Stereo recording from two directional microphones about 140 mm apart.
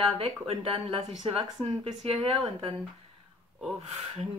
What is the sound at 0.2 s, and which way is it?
Speech, 40° right (ahead or behind).